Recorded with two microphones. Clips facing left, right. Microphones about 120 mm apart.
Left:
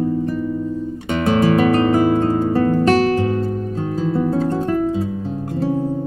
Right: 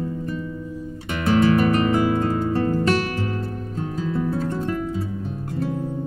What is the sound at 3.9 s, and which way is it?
Music, 30° left (ahead or behind).